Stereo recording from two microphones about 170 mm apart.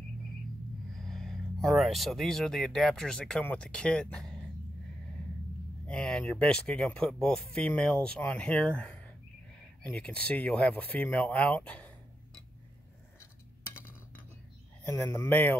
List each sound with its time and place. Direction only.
0.9 s speech: centre (ahead or behind)
5.9 s speech: 5° left (ahead or behind)
13.7 s cutlery: 15° left (ahead or behind)
14.9 s speech: 15° left (ahead or behind)